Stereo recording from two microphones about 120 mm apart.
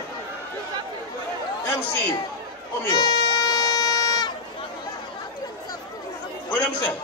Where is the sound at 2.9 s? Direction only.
35° left (ahead or behind).